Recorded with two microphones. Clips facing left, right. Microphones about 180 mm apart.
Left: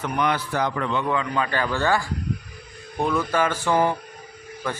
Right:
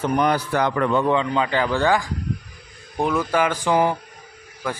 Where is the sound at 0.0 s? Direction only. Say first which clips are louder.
Right 4 dB; 40° right (ahead or behind).